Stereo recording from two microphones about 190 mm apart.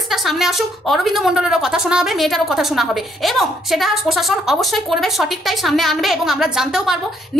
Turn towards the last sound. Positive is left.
turn(degrees=-5)  # may be behind; listen again after turning